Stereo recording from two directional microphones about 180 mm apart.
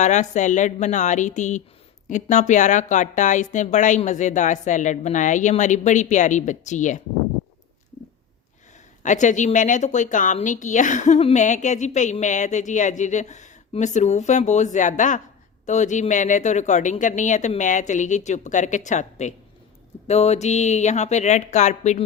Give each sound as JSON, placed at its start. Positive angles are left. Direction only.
{"t": 0.0, "sound": "a woman's voice", "side_deg": 40}
{"t": 9.0, "sound": "a woman's voice", "side_deg": 45}